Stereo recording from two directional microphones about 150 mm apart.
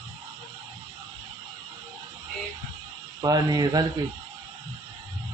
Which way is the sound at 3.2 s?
25° right (ahead or behind).